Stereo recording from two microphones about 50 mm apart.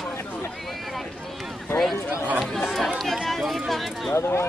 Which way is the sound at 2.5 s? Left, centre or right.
Centre.